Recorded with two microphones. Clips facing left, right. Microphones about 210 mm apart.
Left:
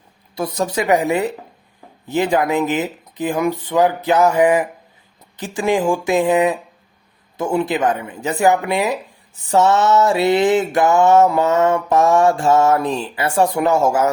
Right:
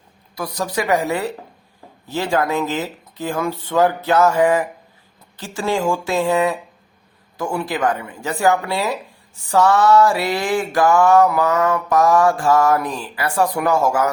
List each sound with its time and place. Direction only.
0.3 s mantra: 25° left (ahead or behind)
2.0 s speech: 20° left (ahead or behind)
7.3 s mantra: 20° left (ahead or behind)